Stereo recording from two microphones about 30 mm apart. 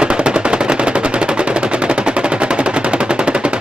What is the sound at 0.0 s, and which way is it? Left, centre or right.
Machine gun, right.